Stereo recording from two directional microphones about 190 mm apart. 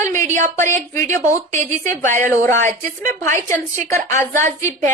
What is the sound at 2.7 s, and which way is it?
Speech, 45° right (ahead or behind).